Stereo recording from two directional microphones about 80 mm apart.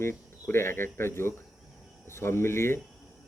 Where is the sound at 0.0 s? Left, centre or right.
Left.